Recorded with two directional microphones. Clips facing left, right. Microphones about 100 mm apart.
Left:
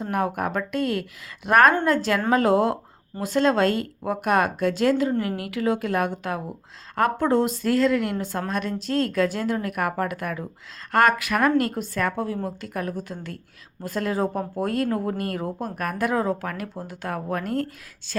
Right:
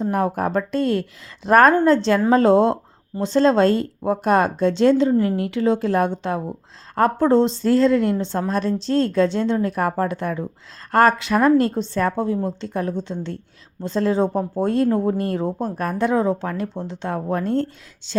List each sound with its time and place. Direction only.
0.0 s a woman's voice: 35° right (ahead or behind)